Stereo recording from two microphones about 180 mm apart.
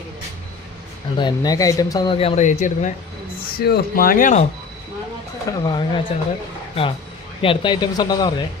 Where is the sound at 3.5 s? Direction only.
60° left (ahead or behind).